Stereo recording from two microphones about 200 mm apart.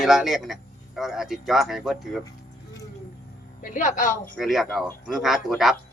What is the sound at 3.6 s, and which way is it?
Speech, 40° left (ahead or behind).